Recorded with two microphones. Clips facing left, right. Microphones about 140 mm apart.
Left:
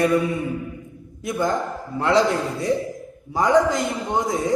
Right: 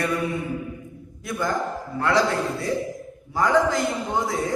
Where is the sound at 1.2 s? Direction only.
20° left (ahead or behind).